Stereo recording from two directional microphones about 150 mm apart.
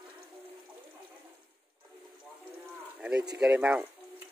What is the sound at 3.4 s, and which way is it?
Speech, 5° right (ahead or behind).